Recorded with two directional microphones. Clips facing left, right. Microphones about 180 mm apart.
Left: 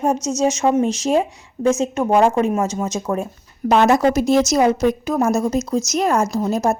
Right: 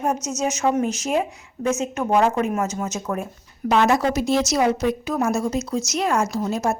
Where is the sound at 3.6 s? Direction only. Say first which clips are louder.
Left 4 dB; 45° left (ahead or behind).